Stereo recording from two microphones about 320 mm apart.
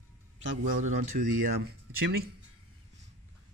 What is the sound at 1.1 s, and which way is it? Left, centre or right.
Speech, right.